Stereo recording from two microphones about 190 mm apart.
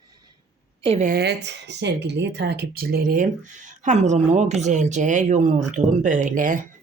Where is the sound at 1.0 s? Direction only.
55° right (ahead or behind).